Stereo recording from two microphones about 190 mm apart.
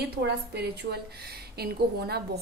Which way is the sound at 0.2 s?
60° right (ahead or behind).